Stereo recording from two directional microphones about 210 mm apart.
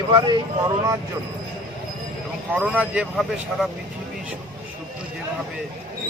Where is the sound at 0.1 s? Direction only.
20° right (ahead or behind).